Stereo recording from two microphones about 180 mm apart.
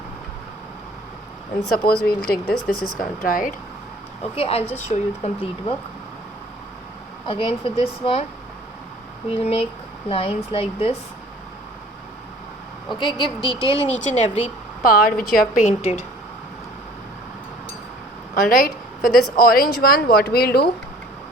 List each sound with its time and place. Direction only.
1.7 s speech: 55° left (ahead or behind)
4.2 s speech: 35° left (ahead or behind)
7.3 s speech: 30° left (ahead or behind)
9.3 s speech: 35° left (ahead or behind)
13.0 s a woman's voice: 25° left (ahead or behind)
14.8 s speech: 55° left (ahead or behind)
15.6 s speech: 40° left (ahead or behind)
18.3 s speech: 50° left (ahead or behind)